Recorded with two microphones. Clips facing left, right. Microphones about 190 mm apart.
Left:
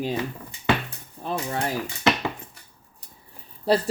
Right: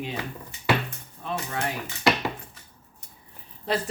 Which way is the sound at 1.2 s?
35° left (ahead or behind).